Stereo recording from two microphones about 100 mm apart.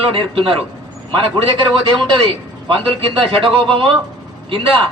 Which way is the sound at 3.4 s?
60° right (ahead or behind).